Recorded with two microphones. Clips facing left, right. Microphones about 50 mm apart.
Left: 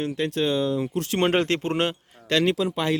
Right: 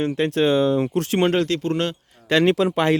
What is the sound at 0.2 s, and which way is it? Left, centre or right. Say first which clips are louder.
Speech: right 6 dB; right.